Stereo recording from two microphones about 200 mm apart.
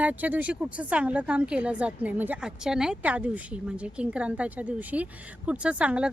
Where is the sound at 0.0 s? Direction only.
10° right (ahead or behind).